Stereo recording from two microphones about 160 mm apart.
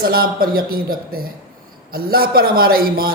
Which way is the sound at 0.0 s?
65° right (ahead or behind).